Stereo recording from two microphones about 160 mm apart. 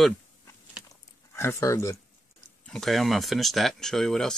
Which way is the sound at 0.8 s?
15° left (ahead or behind).